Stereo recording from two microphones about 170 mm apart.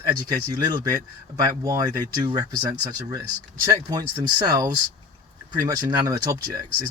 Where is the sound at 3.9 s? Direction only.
25° right (ahead or behind).